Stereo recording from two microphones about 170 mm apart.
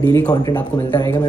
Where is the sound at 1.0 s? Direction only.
25° left (ahead or behind).